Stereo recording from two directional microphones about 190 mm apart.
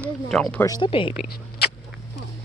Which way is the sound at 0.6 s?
20° left (ahead or behind).